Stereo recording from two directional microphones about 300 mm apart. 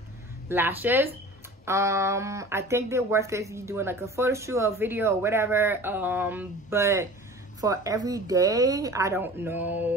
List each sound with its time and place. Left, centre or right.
0.5 s speech: centre